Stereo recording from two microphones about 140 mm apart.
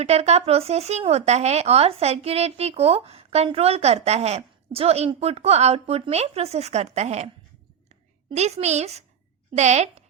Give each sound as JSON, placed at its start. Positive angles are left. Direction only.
{"t": 0.0, "sound": "speech", "side_deg": -50}
{"t": 8.4, "sound": "a woman's voice", "side_deg": -50}